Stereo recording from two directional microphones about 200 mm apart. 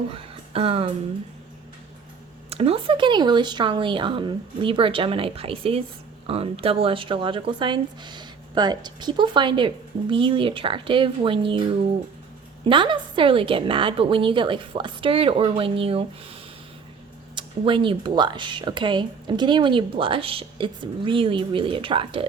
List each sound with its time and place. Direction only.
0.1 s speech: 30° right (ahead or behind)
2.5 s speech: 30° right (ahead or behind)
12.6 s speech: 25° right (ahead or behind)